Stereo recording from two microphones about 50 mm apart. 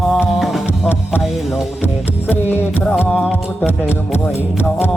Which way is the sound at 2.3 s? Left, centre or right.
Left.